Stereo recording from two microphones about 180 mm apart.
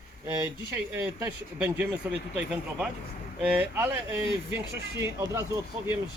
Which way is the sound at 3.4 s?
5° right (ahead or behind).